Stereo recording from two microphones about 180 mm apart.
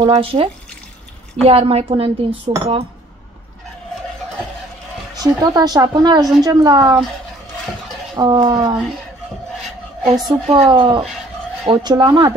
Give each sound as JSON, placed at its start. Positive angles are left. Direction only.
{"t": 0.0, "sound": "a woman's voice", "side_deg": -30}
{"t": 5.1, "sound": "speech", "side_deg": -20}
{"t": 8.2, "sound": "speech", "side_deg": -25}
{"t": 10.2, "sound": "speech", "side_deg": -25}